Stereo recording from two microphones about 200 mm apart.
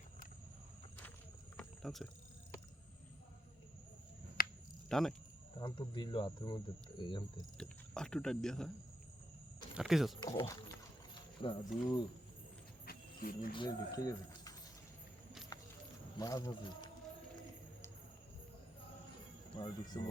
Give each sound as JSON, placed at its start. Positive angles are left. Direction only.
{"t": 1.5, "sound": "a sound", "side_deg": 0}
{"t": 4.4, "sound": "cricket", "side_deg": 45}
{"t": 4.9, "sound": "speech", "side_deg": 0}
{"t": 5.5, "sound": "speech", "side_deg": 25}
{"t": 7.6, "sound": "speech", "side_deg": 5}
{"t": 9.7, "sound": "speech", "side_deg": 0}
{"t": 10.2, "sound": "speech", "side_deg": 20}
{"t": 12.8, "sound": "a sound", "side_deg": 50}
{"t": 13.5, "sound": "speech", "side_deg": 20}
{"t": 16.1, "sound": "speech", "side_deg": 20}
{"t": 19.5, "sound": "speech", "side_deg": 20}